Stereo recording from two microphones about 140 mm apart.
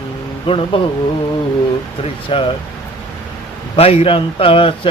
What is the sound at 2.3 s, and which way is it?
Speech, 40° left (ahead or behind).